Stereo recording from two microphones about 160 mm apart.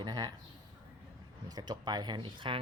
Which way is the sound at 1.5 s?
25° right (ahead or behind).